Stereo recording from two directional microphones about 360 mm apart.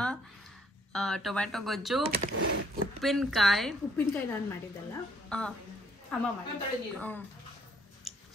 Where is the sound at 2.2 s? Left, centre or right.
Right.